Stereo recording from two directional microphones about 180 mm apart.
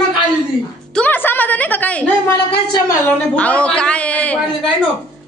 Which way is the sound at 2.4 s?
25° left (ahead or behind).